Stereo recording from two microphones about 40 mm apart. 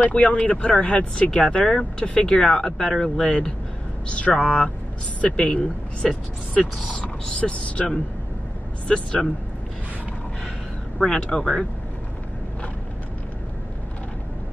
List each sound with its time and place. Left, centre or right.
0.0 s speech: left; by 3.3 s centre
4.1 s speech: left
5.6 s speech: centre
6.6 s speech: left
11.0 s speech: centre